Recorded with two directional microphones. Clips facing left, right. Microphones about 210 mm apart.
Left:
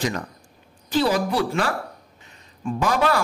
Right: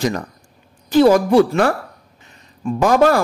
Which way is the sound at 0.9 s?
50° right (ahead or behind).